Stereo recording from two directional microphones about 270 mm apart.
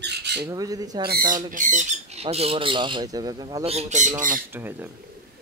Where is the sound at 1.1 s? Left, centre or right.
Right.